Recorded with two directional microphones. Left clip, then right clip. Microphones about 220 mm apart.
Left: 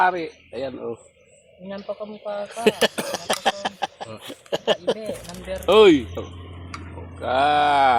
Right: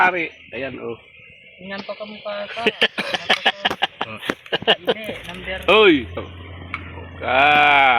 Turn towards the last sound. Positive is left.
turn(degrees=-5)  # may be behind; listen again after turning